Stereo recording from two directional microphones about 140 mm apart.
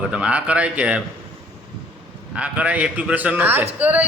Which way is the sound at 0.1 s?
10° right (ahead or behind).